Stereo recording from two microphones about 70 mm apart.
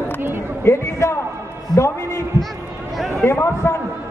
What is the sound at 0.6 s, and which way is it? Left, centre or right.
A man's voice, left.